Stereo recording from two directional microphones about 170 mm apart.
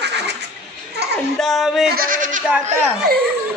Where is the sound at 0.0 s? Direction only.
80° right.